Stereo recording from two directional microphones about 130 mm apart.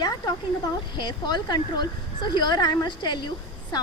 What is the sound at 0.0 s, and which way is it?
A woman's voice, 30° left (ahead or behind).